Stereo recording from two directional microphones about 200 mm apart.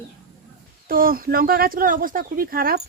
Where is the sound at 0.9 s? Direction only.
45° right (ahead or behind).